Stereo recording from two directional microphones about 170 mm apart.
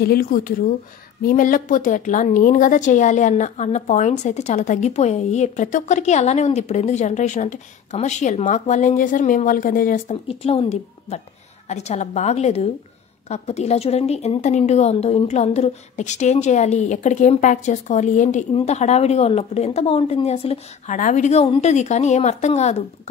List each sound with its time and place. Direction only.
0.0 s a woman's voice: 60° left (ahead or behind)
10.2 s a woman's voice: 35° left (ahead or behind)